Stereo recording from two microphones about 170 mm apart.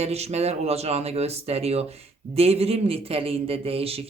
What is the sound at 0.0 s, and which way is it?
Speech, 40° right (ahead or behind).